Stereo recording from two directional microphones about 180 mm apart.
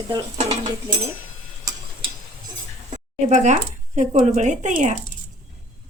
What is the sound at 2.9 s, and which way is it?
Speech, 40° right (ahead or behind).